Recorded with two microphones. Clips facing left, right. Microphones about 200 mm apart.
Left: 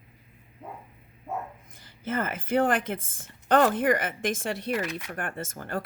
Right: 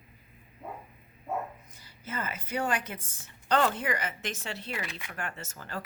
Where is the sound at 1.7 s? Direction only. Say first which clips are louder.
Left 9 dB; 55° left (ahead or behind).